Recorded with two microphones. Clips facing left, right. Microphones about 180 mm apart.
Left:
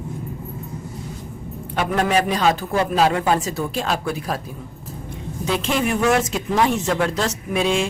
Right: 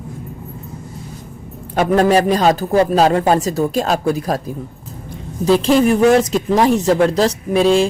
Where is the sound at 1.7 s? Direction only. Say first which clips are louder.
Right 7 dB; 40° right (ahead or behind).